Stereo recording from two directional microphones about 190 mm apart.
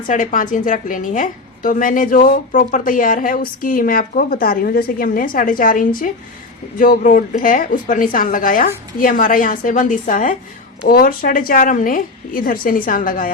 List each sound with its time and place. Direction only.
0.1 s a woman's voice: 45° left (ahead or behind)